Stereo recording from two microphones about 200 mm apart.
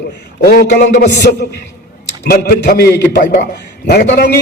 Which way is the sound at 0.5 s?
55° left (ahead or behind).